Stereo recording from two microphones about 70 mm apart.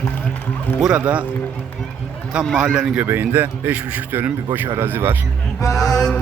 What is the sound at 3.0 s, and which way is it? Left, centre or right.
Speech, right.